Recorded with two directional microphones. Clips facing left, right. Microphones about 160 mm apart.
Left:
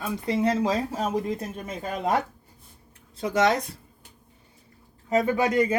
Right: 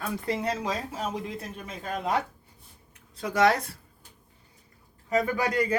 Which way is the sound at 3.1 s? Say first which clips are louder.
Left 1 dB; 25° left (ahead or behind).